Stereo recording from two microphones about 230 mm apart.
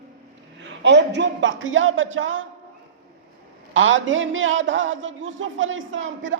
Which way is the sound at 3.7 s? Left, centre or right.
Right.